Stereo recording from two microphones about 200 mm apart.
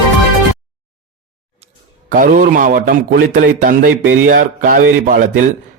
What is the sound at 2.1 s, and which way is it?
A man's voice, 45° right (ahead or behind).